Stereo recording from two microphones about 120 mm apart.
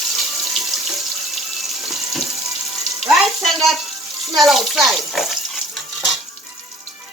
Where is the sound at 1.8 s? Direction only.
Centre (ahead or behind).